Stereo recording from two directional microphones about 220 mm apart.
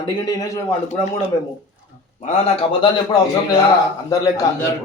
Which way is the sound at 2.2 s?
25° left (ahead or behind).